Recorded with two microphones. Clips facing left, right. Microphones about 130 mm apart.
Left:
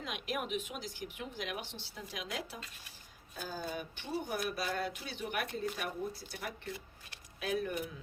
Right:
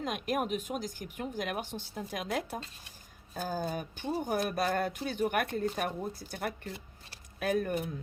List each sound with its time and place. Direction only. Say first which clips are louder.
0.0 s speech: right 6 dB; 45° right (ahead or behind)
6.7 s a sound: right 1 dB; 35° right (ahead or behind)
7.3 s speech: right 5 dB; 50° right (ahead or behind)